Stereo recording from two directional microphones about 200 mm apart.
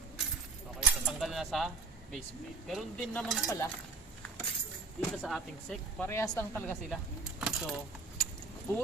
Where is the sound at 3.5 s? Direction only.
15° left (ahead or behind).